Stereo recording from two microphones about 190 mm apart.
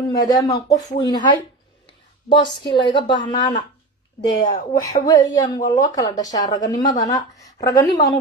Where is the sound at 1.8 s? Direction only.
25° left (ahead or behind).